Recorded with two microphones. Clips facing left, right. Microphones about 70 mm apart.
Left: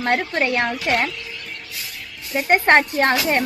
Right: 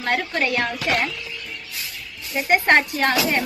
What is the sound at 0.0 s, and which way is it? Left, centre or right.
Speech, left.